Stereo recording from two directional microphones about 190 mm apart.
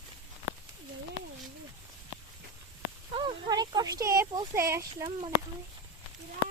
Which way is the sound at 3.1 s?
25° right (ahead or behind).